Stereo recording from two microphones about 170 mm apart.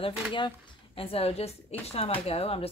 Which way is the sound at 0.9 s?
35° left (ahead or behind).